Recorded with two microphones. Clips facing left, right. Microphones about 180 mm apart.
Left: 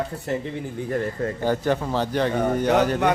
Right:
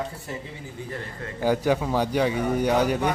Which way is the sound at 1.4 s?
10° right (ahead or behind).